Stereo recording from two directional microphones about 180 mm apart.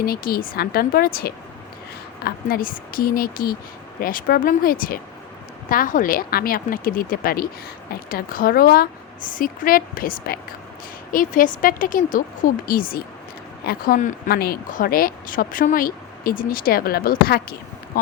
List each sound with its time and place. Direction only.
0.0 s a woman's voice: 55° left (ahead or behind)